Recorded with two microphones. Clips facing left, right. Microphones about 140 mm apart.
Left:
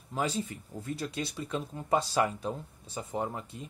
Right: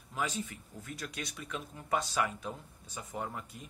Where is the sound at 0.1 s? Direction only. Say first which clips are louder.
Left 4 dB; 35° left (ahead or behind).